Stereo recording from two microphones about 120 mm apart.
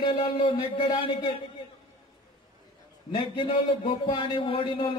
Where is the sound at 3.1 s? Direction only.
45° left (ahead or behind).